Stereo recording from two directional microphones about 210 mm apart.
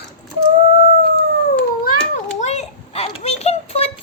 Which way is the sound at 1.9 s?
35° left (ahead or behind).